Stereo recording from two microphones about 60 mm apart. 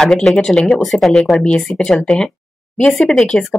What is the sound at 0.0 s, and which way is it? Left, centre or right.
A woman's voice, centre.